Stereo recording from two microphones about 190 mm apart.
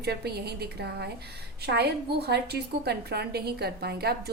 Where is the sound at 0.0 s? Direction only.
60° right (ahead or behind).